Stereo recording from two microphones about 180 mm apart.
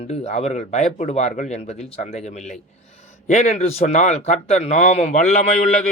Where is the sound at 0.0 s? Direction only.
35° left (ahead or behind).